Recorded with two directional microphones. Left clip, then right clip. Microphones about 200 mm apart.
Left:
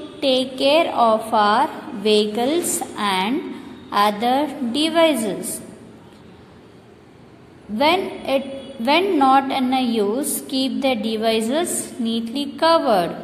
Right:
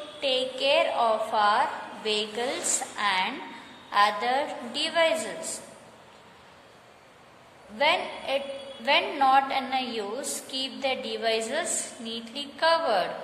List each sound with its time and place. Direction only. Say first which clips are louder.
0.2 s a woman's voice: left 8 dB; 25° left (ahead or behind)
7.7 s a woman's voice: left 6 dB; 25° left (ahead or behind)